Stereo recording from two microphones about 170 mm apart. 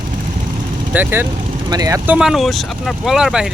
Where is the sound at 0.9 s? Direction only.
10° right (ahead or behind).